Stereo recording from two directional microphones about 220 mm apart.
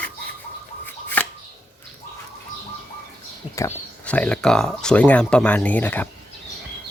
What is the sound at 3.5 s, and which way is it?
Speech, 10° left (ahead or behind).